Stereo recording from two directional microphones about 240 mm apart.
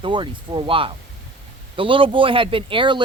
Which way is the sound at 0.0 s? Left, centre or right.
Centre.